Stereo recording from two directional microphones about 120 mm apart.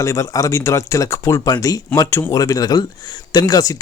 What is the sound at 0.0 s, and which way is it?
Speech, 25° left (ahead or behind).